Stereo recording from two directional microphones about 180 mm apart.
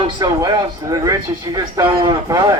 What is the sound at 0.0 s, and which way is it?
Speech, 20° right (ahead or behind).